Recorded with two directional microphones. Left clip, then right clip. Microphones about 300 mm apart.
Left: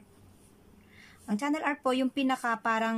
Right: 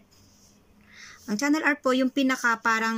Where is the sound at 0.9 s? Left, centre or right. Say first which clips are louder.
Right 4 dB; centre.